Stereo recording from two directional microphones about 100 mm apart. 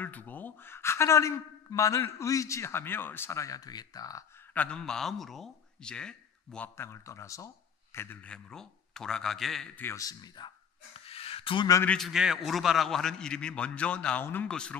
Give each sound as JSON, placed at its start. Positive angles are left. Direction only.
{"t": 0.0, "sound": "a man's voice", "side_deg": 15}
{"t": 4.6, "sound": "a man's voice", "side_deg": 10}
{"t": 6.8, "sound": "speech", "side_deg": 25}
{"t": 8.2, "sound": "a man's voice", "side_deg": 10}
{"t": 9.9, "sound": "speech", "side_deg": 40}
{"t": 11.1, "sound": "a sound", "side_deg": 75}
{"t": 12.0, "sound": "a man's voice", "side_deg": -5}
{"t": 14.5, "sound": "speech", "side_deg": 10}